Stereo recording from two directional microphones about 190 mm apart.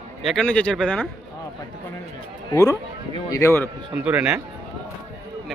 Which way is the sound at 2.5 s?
15° left (ahead or behind).